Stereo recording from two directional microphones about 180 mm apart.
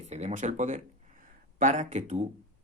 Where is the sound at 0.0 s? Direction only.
40° right (ahead or behind).